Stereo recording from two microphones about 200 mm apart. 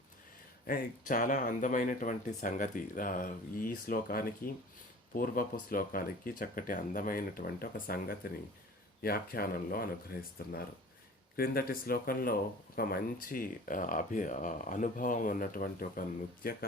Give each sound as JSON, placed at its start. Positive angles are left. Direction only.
{"t": 0.7, "sound": "speech", "side_deg": 40}